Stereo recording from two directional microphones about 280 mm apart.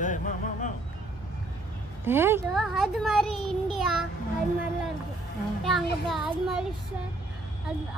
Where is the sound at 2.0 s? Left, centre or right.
Centre.